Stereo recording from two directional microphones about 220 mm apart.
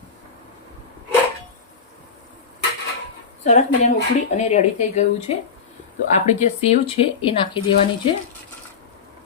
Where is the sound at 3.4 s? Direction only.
30° left (ahead or behind).